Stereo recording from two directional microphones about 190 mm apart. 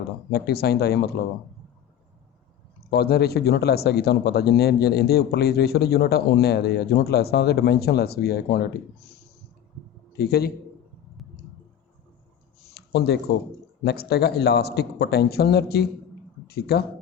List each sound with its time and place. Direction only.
0.3 s speech: 55° left (ahead or behind)
2.9 s speech: 55° left (ahead or behind)
10.1 s a man's voice: 55° left (ahead or behind)
12.7 s a sound: 60° left (ahead or behind)
13.8 s speech: 55° left (ahead or behind)